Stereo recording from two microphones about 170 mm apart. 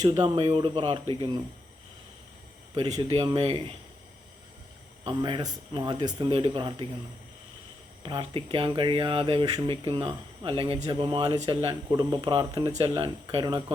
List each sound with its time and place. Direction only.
0.0 s speech: 25° right (ahead or behind)
2.7 s speech: 25° right (ahead or behind)
5.0 s speech: 30° right (ahead or behind)
8.0 s speech: 30° right (ahead or behind)